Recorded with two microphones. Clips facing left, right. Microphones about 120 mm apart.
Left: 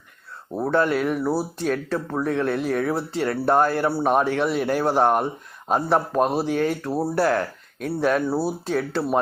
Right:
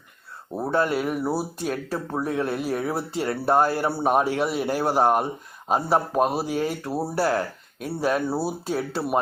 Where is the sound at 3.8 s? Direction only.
10° right (ahead or behind).